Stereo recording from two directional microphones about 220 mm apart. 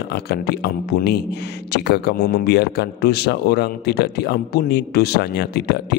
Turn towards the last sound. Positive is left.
turn(degrees=50)  # may be behind; listen again after turning